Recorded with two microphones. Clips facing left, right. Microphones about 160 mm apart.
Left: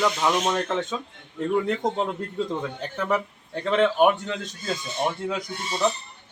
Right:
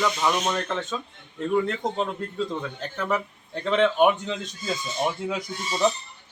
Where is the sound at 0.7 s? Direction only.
15° left (ahead or behind); by 5.4 s 10° right (ahead or behind).